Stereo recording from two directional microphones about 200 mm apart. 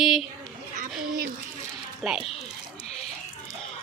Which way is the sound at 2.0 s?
Centre (ahead or behind).